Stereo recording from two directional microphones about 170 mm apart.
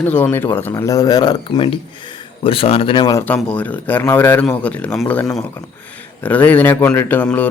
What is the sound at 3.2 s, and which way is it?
Speech, 10° left (ahead or behind).